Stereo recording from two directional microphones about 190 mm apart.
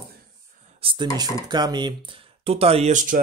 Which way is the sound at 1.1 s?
20° right (ahead or behind).